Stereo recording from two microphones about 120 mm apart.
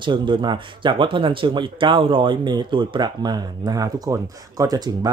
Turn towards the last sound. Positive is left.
turn(degrees=-35)  # may be behind; listen again after turning